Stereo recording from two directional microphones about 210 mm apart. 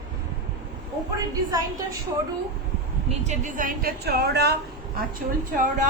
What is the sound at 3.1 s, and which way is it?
A woman's voice, 35° right (ahead or behind).